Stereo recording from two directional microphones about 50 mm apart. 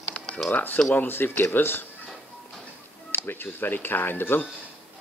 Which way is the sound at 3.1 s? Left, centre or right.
Left.